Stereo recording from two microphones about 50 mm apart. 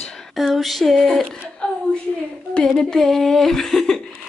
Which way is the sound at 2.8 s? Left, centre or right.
Centre.